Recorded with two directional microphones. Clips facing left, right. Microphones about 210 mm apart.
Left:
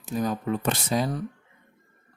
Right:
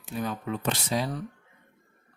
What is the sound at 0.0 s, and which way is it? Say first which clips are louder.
Speech: left 5 dB; 40° left (ahead or behind).